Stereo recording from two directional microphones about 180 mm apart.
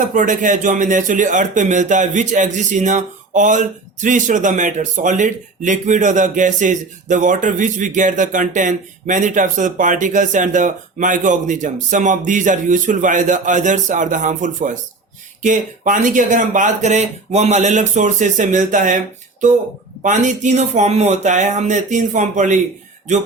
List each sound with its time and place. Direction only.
0.1 s speech: 45° right (ahead or behind)